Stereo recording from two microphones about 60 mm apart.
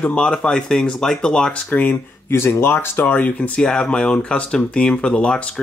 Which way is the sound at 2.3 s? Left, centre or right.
Left.